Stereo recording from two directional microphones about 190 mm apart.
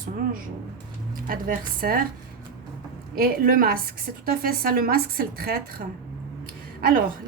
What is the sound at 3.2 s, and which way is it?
A woman's voice, 50° right (ahead or behind).